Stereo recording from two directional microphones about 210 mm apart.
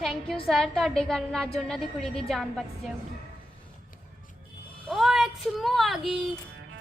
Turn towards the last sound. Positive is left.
turn(degrees=0)  # may be behind; listen again after turning